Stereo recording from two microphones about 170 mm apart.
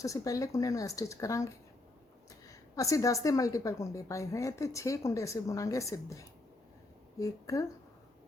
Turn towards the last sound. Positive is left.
turn(degrees=20)  # may be behind; listen again after turning